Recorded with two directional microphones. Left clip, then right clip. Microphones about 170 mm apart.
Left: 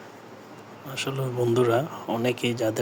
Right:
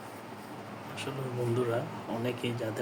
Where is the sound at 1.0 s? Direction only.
70° left (ahead or behind).